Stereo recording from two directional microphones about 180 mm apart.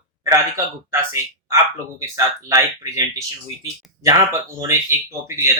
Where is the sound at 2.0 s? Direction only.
15° right (ahead or behind).